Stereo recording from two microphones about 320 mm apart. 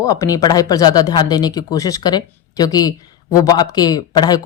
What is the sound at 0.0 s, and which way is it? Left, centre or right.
Speech, centre.